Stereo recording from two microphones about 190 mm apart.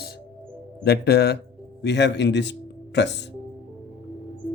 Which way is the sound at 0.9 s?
60° left (ahead or behind).